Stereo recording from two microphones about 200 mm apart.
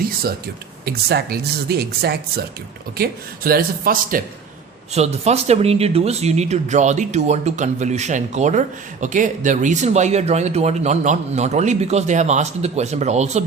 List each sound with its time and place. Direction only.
0.0 s speech: 50° right (ahead or behind)
4.9 s speech: 35° right (ahead or behind)